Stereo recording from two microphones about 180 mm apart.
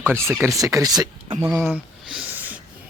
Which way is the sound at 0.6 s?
20° right (ahead or behind).